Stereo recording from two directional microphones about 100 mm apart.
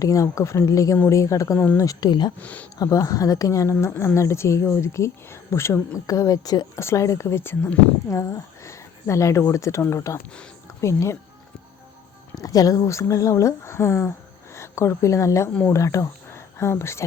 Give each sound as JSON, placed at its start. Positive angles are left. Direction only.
{"t": 0.0, "sound": "speech", "side_deg": 35}
{"t": 2.4, "sound": "speech", "side_deg": 15}
{"t": 2.7, "sound": "speech", "side_deg": 35}
{"t": 6.1, "sound": "speech", "side_deg": 35}
{"t": 6.7, "sound": "speech", "side_deg": 30}
{"t": 10.2, "sound": "speech", "side_deg": 10}
{"t": 10.8, "sound": "speech", "side_deg": 30}
{"t": 12.3, "sound": "a woman's voice", "side_deg": 35}